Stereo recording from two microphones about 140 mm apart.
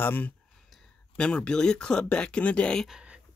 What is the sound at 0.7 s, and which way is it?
Speech, 5° left (ahead or behind).